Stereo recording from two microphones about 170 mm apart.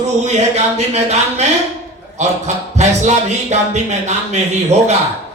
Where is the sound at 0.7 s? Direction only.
40° right (ahead or behind).